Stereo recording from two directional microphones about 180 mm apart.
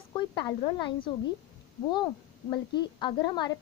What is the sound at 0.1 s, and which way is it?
Speech, 25° left (ahead or behind).